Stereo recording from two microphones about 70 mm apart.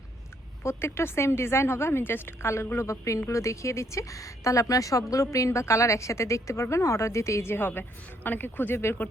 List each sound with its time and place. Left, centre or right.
0.6 s a woman's voice: left